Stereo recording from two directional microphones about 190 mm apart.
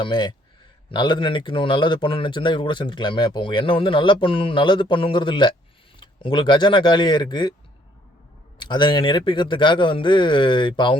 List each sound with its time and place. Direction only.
0.0 s a man's voice: 25° left (ahead or behind)
8.5 s a man's voice: 25° left (ahead or behind)